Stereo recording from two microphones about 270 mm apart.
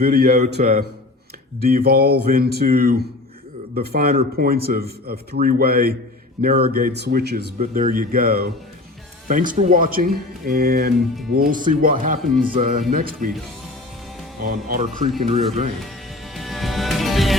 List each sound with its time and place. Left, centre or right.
0.0 s a man's voice: right
14.4 s speech: right
16.3 s music: centre